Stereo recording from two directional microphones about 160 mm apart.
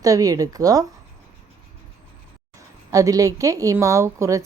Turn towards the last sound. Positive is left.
turn(degrees=-20)  # may be behind; listen again after turning